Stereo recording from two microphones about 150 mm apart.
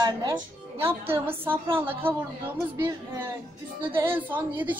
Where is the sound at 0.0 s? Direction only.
30° right (ahead or behind).